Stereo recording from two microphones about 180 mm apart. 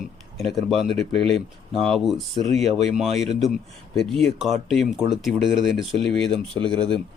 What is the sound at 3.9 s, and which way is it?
A man's voice, 5° left (ahead or behind).